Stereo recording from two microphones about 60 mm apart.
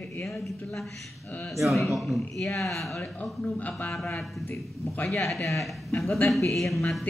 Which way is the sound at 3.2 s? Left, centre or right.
Left.